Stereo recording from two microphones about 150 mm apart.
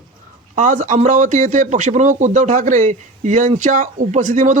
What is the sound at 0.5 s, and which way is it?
A man's voice, 60° right (ahead or behind).